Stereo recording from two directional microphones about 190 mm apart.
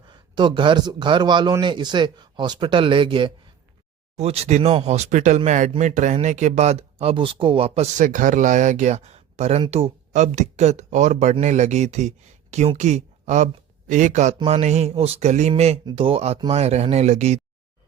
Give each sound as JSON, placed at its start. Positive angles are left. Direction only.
{"t": 0.1, "sound": "a man's voice", "side_deg": -25}